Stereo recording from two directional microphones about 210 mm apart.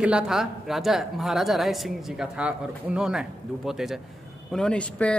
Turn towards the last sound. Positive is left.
turn(degrees=5)  # may be behind; listen again after turning